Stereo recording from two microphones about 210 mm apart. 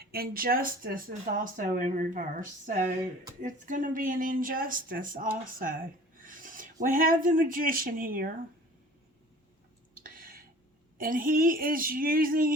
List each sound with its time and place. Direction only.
0.0 s speech: 45° right (ahead or behind)
3.4 s speech: 40° right (ahead or behind)
10.0 s a sound: 40° right (ahead or behind)
10.9 s speech: 40° right (ahead or behind)